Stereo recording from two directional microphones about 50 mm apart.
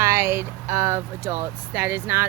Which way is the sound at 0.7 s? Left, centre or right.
Right.